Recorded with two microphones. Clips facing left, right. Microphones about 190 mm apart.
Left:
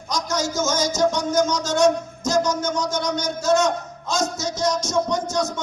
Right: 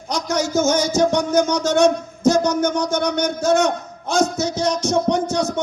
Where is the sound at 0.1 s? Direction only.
60° right (ahead or behind).